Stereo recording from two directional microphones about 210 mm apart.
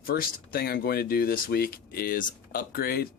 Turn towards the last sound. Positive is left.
turn(degrees=45)  # may be behind; listen again after turning